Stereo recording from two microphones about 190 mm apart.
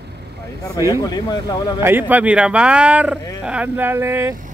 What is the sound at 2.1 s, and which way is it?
Speech, 5° right (ahead or behind).